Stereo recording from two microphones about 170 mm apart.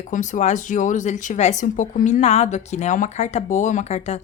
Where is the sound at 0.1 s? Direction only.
45° left (ahead or behind).